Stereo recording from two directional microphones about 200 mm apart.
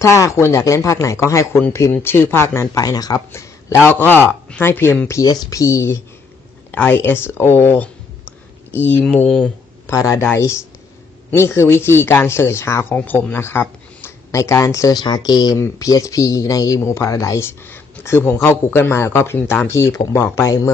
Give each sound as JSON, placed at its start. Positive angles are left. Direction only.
{"t": 0.0, "sound": "speech", "side_deg": 15}
{"t": 6.7, "sound": "a sound", "side_deg": 10}
{"t": 8.9, "sound": "speech", "side_deg": 5}
{"t": 9.8, "sound": "speech", "side_deg": 15}